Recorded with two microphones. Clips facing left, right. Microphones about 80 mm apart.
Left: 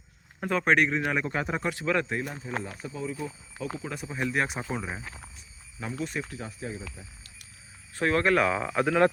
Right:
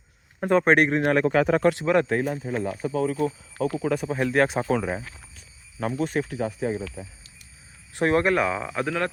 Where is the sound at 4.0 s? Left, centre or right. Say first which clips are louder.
Right 5 dB; right.